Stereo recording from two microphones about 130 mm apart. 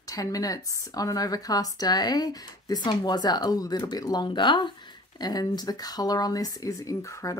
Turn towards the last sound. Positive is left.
turn(degrees=25)  # may be behind; listen again after turning